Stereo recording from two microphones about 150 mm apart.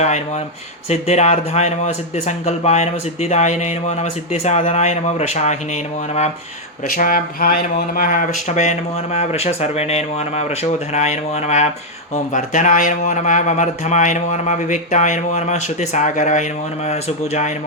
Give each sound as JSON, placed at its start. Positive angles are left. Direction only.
{"t": 0.0, "sound": "speech", "side_deg": 50}
{"t": 6.8, "sound": "speech", "side_deg": 70}